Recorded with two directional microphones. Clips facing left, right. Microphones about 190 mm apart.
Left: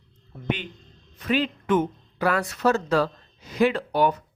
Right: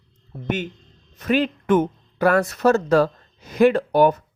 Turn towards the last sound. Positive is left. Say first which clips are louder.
# right 6 dB
turn(degrees=-45)  # may be behind; listen again after turning